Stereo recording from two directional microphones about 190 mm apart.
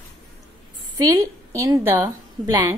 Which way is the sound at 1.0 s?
15° right (ahead or behind).